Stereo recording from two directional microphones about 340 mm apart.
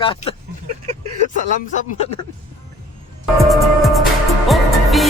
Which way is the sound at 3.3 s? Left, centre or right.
Centre.